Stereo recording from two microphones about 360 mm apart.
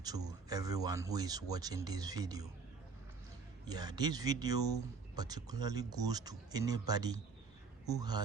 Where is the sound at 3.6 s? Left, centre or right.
Centre.